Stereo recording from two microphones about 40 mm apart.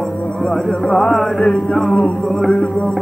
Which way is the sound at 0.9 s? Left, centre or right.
Centre.